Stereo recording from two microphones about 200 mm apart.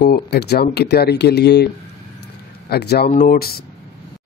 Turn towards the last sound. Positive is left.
turn(degrees=50)  # may be behind; listen again after turning